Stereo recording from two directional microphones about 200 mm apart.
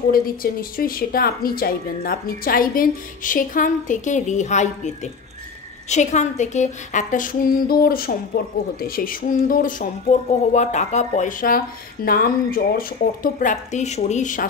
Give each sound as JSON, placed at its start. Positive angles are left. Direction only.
{"t": 0.1, "sound": "speech", "side_deg": 45}